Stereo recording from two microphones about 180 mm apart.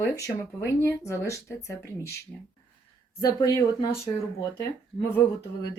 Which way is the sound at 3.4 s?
25° left (ahead or behind).